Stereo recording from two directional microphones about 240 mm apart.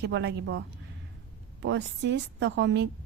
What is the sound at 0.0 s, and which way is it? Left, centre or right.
Speech, right.